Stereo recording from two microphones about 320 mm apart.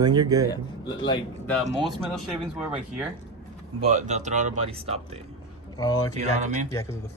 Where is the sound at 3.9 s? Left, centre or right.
Right.